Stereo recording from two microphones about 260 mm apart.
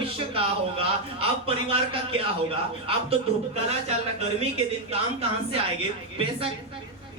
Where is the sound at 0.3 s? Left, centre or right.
Right.